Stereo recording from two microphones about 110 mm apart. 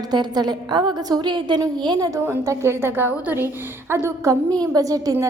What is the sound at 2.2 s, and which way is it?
A woman's voice, 25° right (ahead or behind).